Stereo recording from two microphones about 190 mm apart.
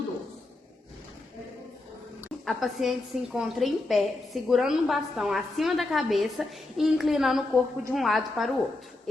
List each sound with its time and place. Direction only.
2.4 s a woman's voice: centre (ahead or behind)